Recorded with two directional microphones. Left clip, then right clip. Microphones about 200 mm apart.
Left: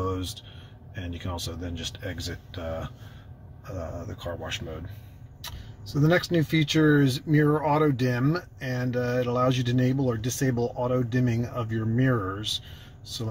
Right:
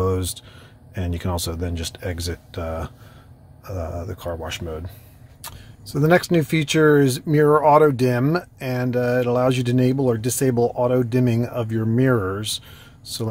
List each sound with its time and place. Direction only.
0.0 s a sound: 40° right (ahead or behind)
0.9 s speech: 45° right (ahead or behind)
6.0 s speech: 40° right (ahead or behind)